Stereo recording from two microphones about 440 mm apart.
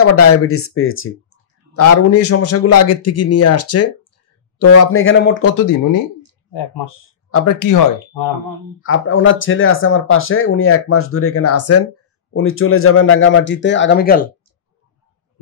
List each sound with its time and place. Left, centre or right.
0.0 s a man's voice: left
5.6 s speech: left
6.5 s speech: left
7.2 s speech: left
7.5 s speech: left
8.8 s speech: left